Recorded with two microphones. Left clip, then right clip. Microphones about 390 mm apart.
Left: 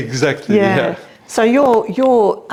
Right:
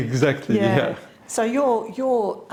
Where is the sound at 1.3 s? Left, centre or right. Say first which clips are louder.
Left 8 dB; left.